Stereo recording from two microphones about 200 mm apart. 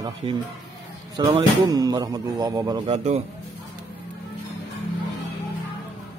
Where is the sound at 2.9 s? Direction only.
35° right (ahead or behind).